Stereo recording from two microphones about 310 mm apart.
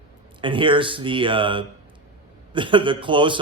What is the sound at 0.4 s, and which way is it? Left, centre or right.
Speech, centre.